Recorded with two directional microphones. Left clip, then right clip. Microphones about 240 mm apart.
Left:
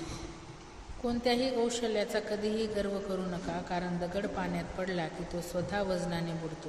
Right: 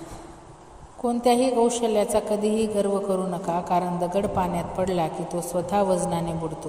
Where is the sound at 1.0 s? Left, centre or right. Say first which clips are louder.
Right 10 dB; right.